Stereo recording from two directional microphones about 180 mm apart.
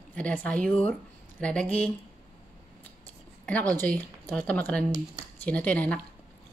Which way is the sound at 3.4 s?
10° left (ahead or behind).